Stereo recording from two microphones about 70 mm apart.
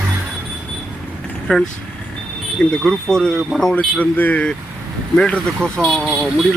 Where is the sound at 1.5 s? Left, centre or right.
Centre.